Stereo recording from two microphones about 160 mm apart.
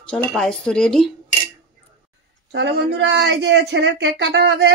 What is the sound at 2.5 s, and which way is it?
Speech, 90° right.